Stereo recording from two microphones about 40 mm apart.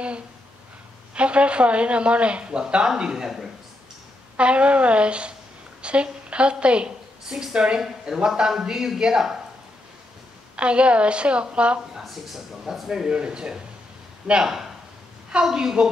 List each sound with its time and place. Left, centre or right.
1.1 s speech: right; by 3.4 s centre
4.4 s a woman's voice: right
8.4 s speech: centre
10.5 s speech: right
11.9 s speech: centre
13.1 s speech: right
14.4 s speech: centre